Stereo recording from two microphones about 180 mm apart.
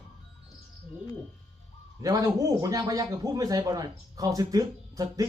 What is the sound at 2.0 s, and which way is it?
A man's voice, 20° right (ahead or behind).